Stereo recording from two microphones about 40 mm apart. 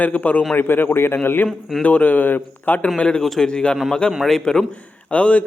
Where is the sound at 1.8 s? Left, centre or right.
Left.